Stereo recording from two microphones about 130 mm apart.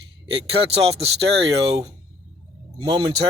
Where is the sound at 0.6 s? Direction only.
50° right (ahead or behind).